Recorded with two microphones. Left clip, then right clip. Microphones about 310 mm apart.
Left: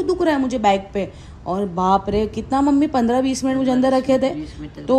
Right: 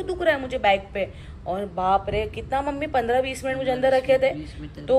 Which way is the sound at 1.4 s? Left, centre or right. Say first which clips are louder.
Left 4 dB; left.